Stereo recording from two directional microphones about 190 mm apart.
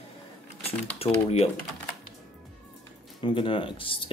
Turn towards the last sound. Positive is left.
turn(degrees=30)  # may be behind; listen again after turning